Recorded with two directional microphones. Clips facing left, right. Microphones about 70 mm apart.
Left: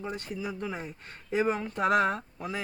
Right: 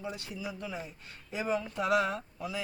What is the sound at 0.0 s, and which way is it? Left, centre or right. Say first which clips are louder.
Speech: left 4 dB; left.